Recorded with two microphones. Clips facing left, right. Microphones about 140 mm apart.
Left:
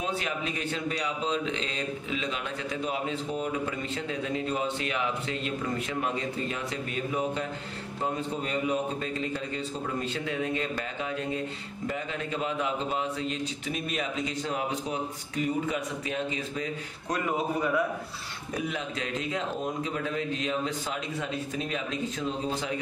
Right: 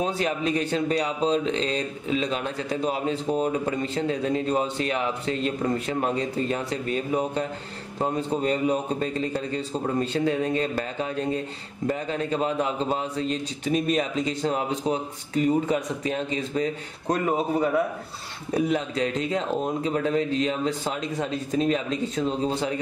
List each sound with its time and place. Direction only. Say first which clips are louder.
0.0 s speech: right 6 dB; 35° right (ahead or behind)